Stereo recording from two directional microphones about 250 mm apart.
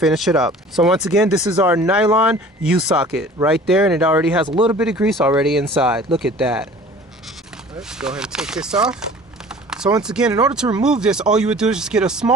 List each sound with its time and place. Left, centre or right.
0.0 s speech: centre
4.4 s speech: centre
4.8 s speech: centre
9.5 s a sound: centre
10.0 s speech: centre